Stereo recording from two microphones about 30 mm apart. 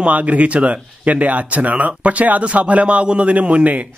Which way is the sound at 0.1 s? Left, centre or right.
Right.